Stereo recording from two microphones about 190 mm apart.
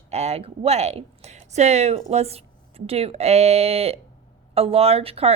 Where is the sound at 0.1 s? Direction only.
35° right (ahead or behind).